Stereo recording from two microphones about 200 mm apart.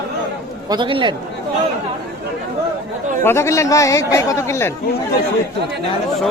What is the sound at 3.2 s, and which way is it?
A man's voice, 15° left (ahead or behind).